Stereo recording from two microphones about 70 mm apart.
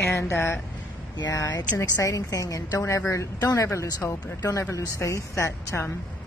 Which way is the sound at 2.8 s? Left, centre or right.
Left.